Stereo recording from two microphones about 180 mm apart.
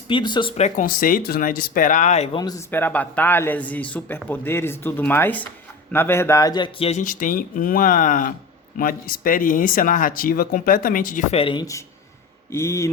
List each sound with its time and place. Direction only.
0.1 s speech: 25° left (ahead or behind)
0.9 s speech: 50° left (ahead or behind); by 2.4 s 35° left (ahead or behind)
2.4 s a man's voice: 15° left (ahead or behind)